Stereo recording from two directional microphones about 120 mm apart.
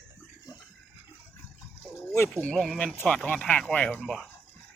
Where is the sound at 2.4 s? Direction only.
5° left (ahead or behind).